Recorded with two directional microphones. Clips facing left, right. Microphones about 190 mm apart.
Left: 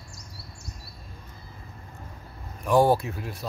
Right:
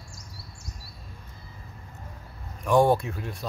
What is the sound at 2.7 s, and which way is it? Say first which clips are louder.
Speech: even; centre (ahead or behind).